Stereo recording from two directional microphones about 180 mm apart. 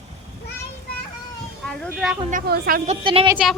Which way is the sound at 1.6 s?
Centre (ahead or behind).